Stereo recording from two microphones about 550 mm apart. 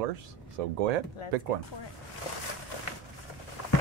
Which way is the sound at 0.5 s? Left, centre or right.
Right.